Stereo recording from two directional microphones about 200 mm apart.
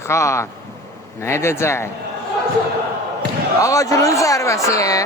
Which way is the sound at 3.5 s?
15° left (ahead or behind).